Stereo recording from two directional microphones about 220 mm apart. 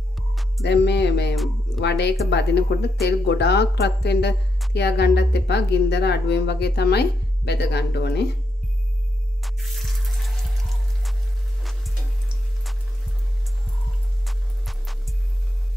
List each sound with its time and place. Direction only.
0.1 s music: centre (ahead or behind)
0.7 s speech: 50° left (ahead or behind)
9.4 s music: centre (ahead or behind)
14.2 s music: centre (ahead or behind)